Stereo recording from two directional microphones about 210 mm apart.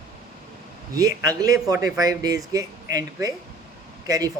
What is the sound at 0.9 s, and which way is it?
Speech, 15° right (ahead or behind).